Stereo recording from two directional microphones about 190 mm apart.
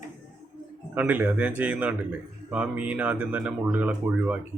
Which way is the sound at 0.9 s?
10° right (ahead or behind).